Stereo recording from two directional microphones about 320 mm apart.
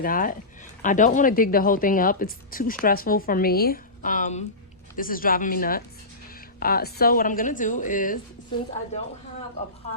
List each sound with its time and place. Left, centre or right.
0.0 s speech: left